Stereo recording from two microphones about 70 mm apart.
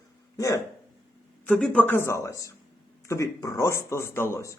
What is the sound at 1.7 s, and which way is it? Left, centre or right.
Speech, left.